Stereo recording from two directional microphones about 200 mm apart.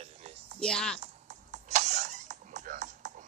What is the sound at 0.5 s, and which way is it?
Speech, 5° left (ahead or behind).